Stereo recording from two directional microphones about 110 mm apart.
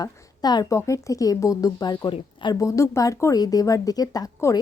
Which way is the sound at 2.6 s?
30° left (ahead or behind).